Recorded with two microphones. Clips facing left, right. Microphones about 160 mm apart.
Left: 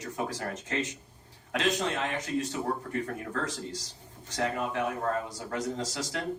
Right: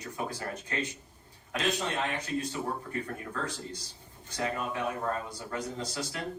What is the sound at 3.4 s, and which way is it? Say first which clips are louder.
Speech: left 2 dB; 90° left.